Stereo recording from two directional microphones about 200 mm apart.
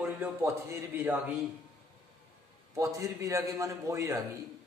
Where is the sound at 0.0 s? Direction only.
10° right (ahead or behind).